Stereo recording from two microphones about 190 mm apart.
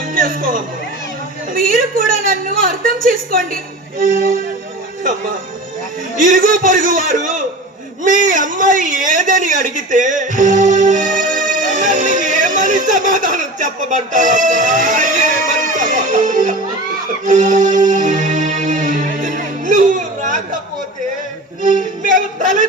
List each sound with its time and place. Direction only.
0.1 s a woman's voice: 45° right (ahead or behind)
6.1 s a woman's voice: 45° right (ahead or behind)
17.2 s music: 40° right (ahead or behind)
21.6 s speech: 45° right (ahead or behind)